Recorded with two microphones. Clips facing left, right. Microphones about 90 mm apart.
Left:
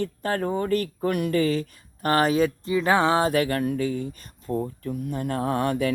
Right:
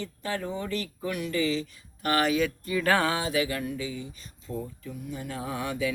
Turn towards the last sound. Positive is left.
turn(degrees=55)  # may be behind; listen again after turning